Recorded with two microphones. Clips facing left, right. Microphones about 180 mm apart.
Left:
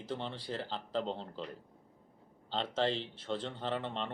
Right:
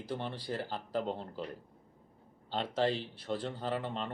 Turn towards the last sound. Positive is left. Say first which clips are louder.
# right 1 dB
turn(degrees=-5)  # may be behind; listen again after turning